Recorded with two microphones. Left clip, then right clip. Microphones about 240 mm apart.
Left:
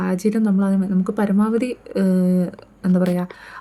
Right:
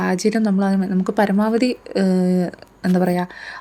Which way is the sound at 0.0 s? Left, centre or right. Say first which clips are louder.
Right 2 dB; centre.